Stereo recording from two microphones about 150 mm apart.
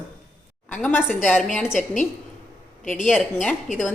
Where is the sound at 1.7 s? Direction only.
55° left (ahead or behind).